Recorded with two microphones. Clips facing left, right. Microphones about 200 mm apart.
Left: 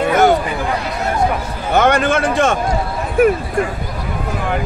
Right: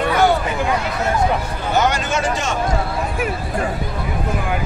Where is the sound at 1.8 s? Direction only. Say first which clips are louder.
Left 5 dB; 55° left (ahead or behind).